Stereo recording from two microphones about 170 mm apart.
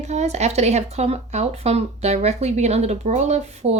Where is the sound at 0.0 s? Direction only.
40° right (ahead or behind).